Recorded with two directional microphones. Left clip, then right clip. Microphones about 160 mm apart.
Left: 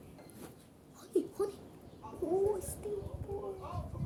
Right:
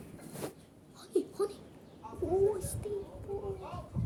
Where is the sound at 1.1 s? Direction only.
Centre (ahead or behind).